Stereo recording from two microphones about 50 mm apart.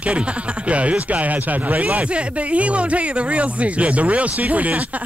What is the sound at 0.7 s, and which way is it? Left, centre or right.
Speech, right.